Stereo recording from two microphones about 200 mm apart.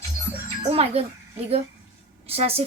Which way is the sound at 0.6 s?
30° right (ahead or behind).